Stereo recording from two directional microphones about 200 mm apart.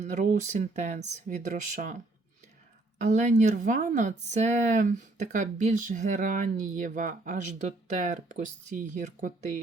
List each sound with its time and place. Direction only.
0.0 s speech: 40° right (ahead or behind)
3.1 s speech: 35° right (ahead or behind)